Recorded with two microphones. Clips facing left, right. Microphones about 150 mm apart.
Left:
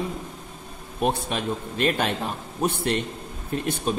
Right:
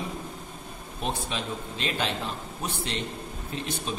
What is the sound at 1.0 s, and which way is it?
A man's voice, 55° left (ahead or behind).